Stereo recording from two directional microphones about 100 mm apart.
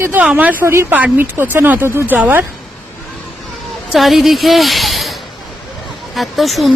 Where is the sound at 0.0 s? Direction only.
20° right (ahead or behind).